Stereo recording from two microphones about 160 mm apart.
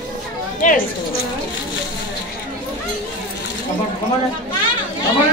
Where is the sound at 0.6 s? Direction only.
55° left (ahead or behind).